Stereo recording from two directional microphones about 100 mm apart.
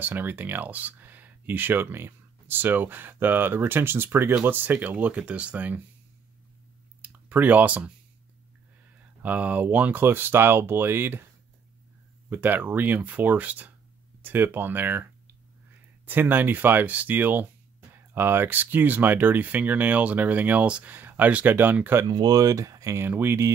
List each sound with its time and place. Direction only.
0.0 s speech: 20° right (ahead or behind)
7.0 s a sound: 15° right (ahead or behind)
9.2 s speech: 15° right (ahead or behind)
12.3 s speech: 15° right (ahead or behind)
16.1 s speech: 20° right (ahead or behind)
22.0 s speech: 40° right (ahead or behind); by 23.5 s 25° right (ahead or behind)